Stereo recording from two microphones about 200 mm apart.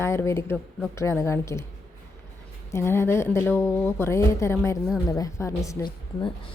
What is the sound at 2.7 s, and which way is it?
A woman's voice, 10° left (ahead or behind).